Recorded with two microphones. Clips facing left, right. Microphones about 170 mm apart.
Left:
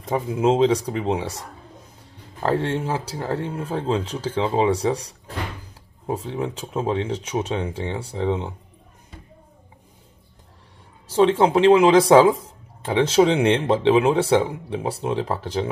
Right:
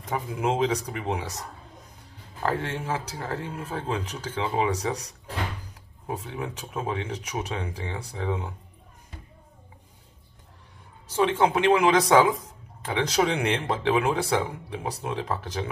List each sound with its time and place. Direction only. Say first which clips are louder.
0.0 s speech: left 7 dB; 25° left (ahead or behind)
2.4 s speech: left 6 dB; 30° left (ahead or behind)
11.1 s speech: left 6 dB; 30° left (ahead or behind)